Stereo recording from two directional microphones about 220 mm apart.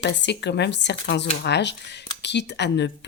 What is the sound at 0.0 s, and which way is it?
A woman's voice, 55° left (ahead or behind).